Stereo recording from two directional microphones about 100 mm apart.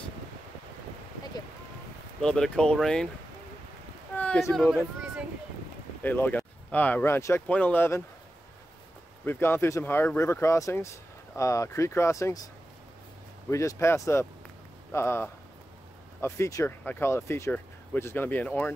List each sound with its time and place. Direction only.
2.2 s speech: 5° left (ahead or behind)
4.1 s a sound: 15° left (ahead or behind)
4.6 s speech: 5° right (ahead or behind)
6.0 s speech: 15° left (ahead or behind)
7.2 s speech: 30° left (ahead or behind)
7.4 s speech: 15° left (ahead or behind)
9.2 s speech: 20° left (ahead or behind)
13.5 s speech: 30° left (ahead or behind)